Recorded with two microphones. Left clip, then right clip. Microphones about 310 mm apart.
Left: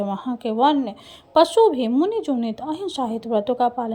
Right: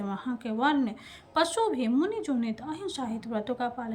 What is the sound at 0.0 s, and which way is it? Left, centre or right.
Speech, left.